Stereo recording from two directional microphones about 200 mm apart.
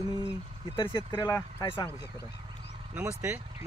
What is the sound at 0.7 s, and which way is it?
Speech, 20° left (ahead or behind).